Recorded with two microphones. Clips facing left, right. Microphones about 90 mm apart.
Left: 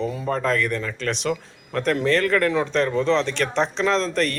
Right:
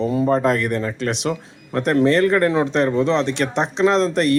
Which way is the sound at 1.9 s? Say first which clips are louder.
Right 6 dB; 25° right (ahead or behind).